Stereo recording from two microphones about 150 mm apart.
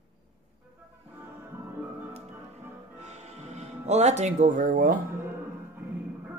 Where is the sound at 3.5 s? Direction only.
50° right (ahead or behind); by 5.0 s 65° right (ahead or behind).